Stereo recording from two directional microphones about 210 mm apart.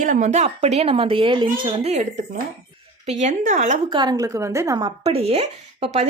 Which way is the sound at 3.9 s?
20° right (ahead or behind).